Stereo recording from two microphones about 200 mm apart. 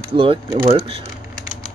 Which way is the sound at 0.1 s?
25° right (ahead or behind).